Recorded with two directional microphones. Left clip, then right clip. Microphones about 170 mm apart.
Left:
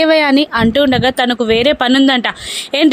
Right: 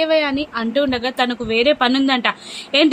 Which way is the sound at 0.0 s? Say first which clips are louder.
Left 7 dB; 55° left (ahead or behind).